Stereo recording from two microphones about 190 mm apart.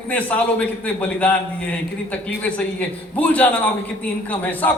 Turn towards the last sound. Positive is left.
turn(degrees=10)  # may be behind; listen again after turning